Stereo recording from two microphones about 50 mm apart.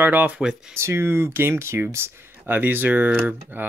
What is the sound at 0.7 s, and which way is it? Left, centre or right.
Speech, right.